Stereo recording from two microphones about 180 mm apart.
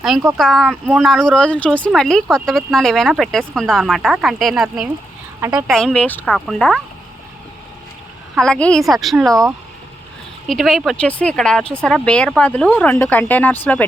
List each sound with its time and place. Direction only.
0.0 s speech: centre (ahead or behind)
5.4 s speech: 20° right (ahead or behind)
5.6 s speech: centre (ahead or behind)
8.4 s speech: 5° left (ahead or behind)
10.4 s speech: centre (ahead or behind)